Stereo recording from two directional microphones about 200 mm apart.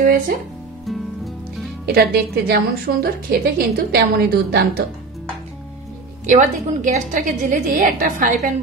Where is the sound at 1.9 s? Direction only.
50° right (ahead or behind).